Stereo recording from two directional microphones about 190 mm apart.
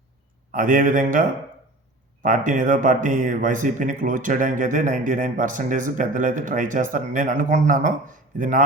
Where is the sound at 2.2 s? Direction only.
45° right (ahead or behind).